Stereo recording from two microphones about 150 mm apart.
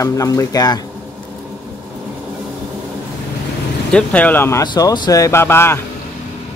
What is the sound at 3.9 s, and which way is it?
Speech, 10° left (ahead or behind).